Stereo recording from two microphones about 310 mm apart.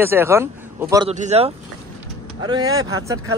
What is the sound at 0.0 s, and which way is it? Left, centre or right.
Speech, centre.